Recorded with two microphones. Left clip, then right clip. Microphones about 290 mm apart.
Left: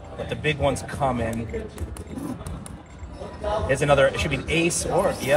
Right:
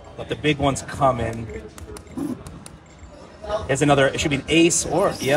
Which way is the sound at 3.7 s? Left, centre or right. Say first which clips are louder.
Right 1 dB; right.